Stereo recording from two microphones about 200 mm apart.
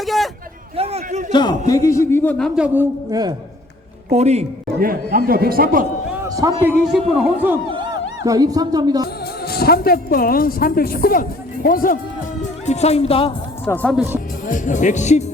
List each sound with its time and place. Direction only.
0.0 s a sound: centre (ahead or behind)
0.8 s a sound: 30° right (ahead or behind)
1.3 s a man's voice: 20° left (ahead or behind)
3.1 s a man's voice: 20° right (ahead or behind)
4.1 s a man's voice: 35° right (ahead or behind)
4.8 s a man's voice: 45° right (ahead or behind)
6.2 s a man's voice: 20° right (ahead or behind)
6.6 s speech: 5° right (ahead or behind)
7.7 s speech: 20° right (ahead or behind)
9.2 s speech: 50° left (ahead or behind)
12.6 s speech: 35° left (ahead or behind)
13.7 s a man's voice: 10° left (ahead or behind)
13.9 s speech: centre (ahead or behind)
14.4 s speech: 40° left (ahead or behind)